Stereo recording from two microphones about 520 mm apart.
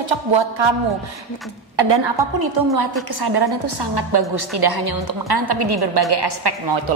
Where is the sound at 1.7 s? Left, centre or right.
Right.